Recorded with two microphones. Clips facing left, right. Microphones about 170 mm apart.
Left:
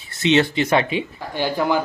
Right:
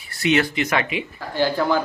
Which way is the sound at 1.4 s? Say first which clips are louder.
Right 1 dB; 15° left (ahead or behind).